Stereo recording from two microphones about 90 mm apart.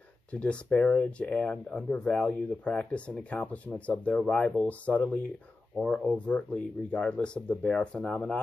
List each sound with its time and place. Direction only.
0.3 s speech: 15° left (ahead or behind)